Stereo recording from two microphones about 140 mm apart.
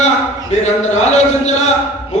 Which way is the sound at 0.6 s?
55° left (ahead or behind).